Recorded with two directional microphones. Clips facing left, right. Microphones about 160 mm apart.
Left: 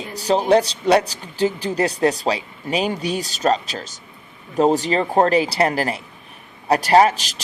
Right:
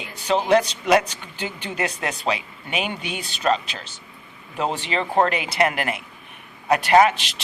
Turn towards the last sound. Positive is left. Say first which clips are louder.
# left 2 dB
turn(degrees=40)  # may be behind; listen again after turning